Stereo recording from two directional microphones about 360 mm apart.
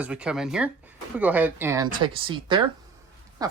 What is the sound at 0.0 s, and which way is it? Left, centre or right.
Speech, centre.